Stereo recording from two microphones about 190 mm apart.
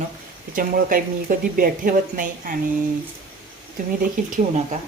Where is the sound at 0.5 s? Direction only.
45° right (ahead or behind).